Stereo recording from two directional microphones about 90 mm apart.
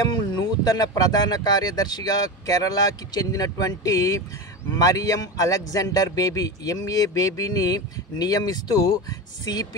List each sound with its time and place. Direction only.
0.1 s speech: 50° left (ahead or behind)